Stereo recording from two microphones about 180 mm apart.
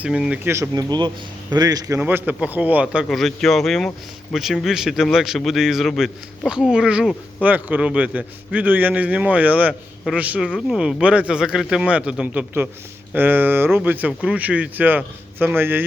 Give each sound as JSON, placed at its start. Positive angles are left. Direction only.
{"t": 0.0, "sound": "speech", "side_deg": -5}
{"t": 2.0, "sound": "speech", "side_deg": -10}
{"t": 7.4, "sound": "a man's voice", "side_deg": -10}